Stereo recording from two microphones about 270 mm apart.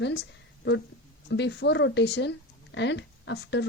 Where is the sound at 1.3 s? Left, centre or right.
Left.